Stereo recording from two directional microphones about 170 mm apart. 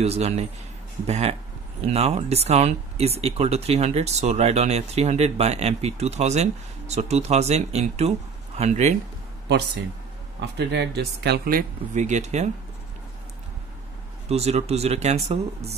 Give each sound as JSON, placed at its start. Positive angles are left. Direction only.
{"t": 0.0, "sound": "speech", "side_deg": -40}
{"t": 10.6, "sound": "speech", "side_deg": -85}
{"t": 14.3, "sound": "speech", "side_deg": -40}